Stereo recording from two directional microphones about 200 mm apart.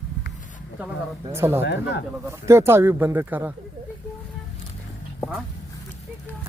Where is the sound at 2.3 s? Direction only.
15° right (ahead or behind).